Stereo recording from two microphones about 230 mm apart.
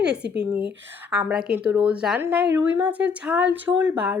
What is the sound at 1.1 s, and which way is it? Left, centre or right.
A woman's voice, centre.